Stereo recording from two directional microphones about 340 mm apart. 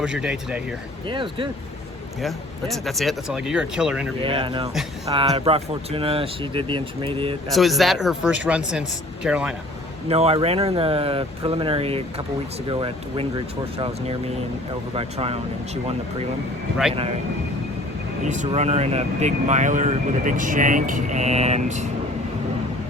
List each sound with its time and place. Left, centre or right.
0.0 s speech: centre
1.0 s speech: centre
2.2 s speech: centre
4.2 s speech: centre
7.5 s speech: centre
10.1 s speech: centre
16.9 s speech: centre
18.3 s speech: right